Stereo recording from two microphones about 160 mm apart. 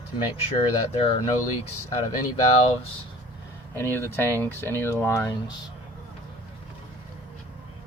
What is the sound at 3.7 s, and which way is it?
Speech, 15° left (ahead or behind).